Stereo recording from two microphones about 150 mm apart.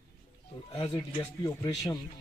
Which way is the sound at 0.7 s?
30° left (ahead or behind).